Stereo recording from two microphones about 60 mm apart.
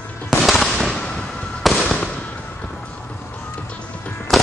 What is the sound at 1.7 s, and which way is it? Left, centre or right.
Fireworks, centre.